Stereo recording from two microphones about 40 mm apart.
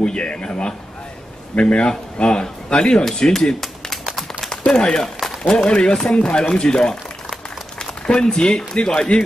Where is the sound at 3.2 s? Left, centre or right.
Centre.